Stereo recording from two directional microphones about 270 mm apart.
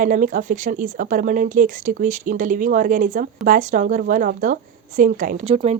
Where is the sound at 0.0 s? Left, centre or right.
Right.